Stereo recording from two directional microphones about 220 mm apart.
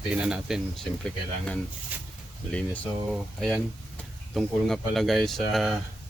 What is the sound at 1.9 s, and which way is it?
Speech, 10° right (ahead or behind).